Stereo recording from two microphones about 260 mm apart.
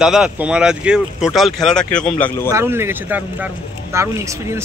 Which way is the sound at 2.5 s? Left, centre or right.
Centre.